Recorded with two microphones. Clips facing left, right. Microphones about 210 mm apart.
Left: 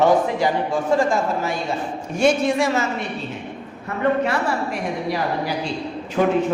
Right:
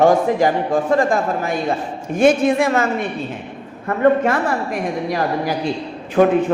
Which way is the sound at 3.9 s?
50° right (ahead or behind).